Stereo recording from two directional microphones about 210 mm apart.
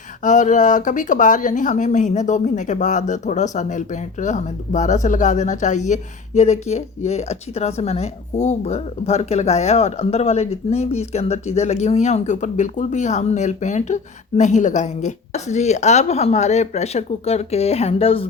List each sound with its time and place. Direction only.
0.2 s speech: 35° left (ahead or behind)